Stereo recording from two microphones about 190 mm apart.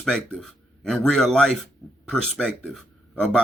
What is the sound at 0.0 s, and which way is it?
Speech, centre (ahead or behind).